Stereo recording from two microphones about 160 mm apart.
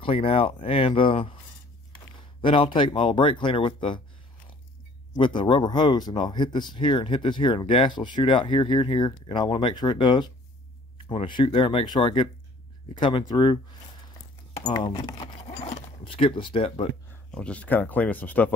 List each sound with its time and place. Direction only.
0.0 s speech: 35° left (ahead or behind)
2.4 s speech: 30° left (ahead or behind)
5.1 s speech: 30° left (ahead or behind)
14.6 s speech: 25° left (ahead or behind)
17.1 s speech: 10° left (ahead or behind)